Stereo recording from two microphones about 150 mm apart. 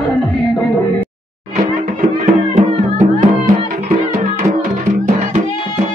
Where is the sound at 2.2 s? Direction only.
55° right (ahead or behind).